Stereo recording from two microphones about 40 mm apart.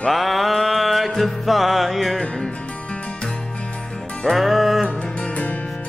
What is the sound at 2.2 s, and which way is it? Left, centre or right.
Music, left.